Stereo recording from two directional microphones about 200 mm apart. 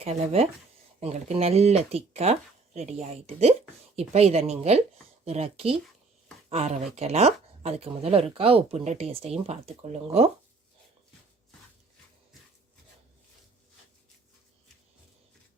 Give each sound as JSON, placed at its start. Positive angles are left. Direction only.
{"t": 0.0, "sound": "speech", "side_deg": -30}